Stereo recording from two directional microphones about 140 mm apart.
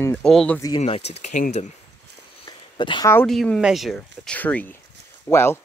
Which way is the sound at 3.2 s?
5° left (ahead or behind).